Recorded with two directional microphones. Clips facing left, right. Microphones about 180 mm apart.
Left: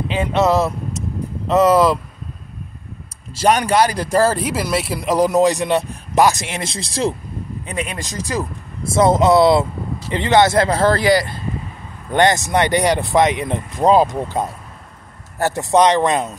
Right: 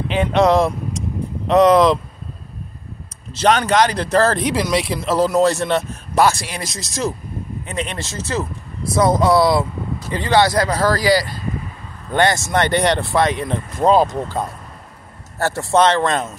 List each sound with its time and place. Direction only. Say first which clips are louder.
0.3 s speech: right 2 dB; 5° left (ahead or behind)
3.3 s speech: even; 10° left (ahead or behind)
5.0 s speech: left 2 dB; 15° left (ahead or behind)
7.6 s speech: even; 10° left (ahead or behind)
8.8 s speech: left 2 dB; 25° left (ahead or behind)